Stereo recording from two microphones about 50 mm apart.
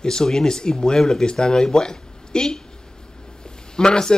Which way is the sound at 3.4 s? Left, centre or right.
Centre.